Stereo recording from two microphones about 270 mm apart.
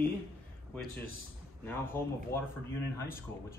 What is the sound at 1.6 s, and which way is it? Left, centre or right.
Speech, centre.